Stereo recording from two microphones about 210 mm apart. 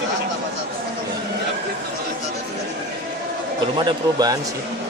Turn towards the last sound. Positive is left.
turn(degrees=-20)  # may be behind; listen again after turning